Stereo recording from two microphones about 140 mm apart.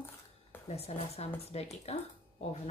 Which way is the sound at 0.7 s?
45° left (ahead or behind).